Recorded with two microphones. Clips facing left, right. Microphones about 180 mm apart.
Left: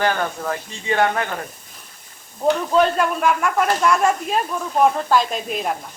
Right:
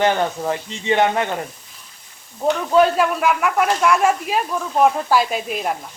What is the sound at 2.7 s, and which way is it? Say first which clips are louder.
Speech: right 2 dB; 5° right (ahead or behind).